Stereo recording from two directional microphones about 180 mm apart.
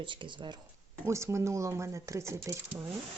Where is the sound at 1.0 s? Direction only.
15° right (ahead or behind).